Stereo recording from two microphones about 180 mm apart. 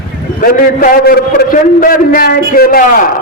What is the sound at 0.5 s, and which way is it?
A man's voice, 50° left (ahead or behind).